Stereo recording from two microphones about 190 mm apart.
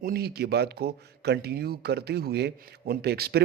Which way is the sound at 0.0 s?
55° right (ahead or behind).